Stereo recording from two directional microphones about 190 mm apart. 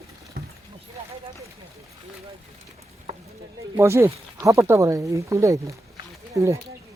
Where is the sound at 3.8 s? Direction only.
15° right (ahead or behind).